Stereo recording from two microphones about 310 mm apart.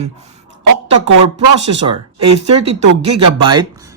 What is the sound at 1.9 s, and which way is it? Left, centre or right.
Speech, right.